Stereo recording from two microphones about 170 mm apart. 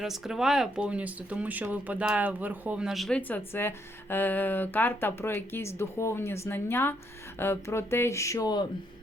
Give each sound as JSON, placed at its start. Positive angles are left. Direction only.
{"t": 0.0, "sound": "speech", "side_deg": 0}